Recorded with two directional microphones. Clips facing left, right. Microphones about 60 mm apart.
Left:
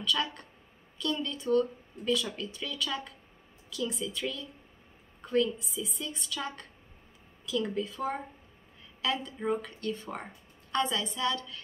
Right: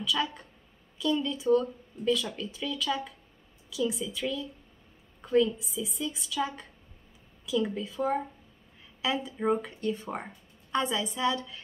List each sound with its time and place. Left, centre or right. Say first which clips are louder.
0.0 s a woman's voice: right 1 dB; centre
9.0 s speech: right 3 dB; centre